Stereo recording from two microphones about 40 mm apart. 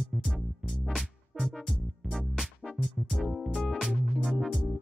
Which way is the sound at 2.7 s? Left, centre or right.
Centre.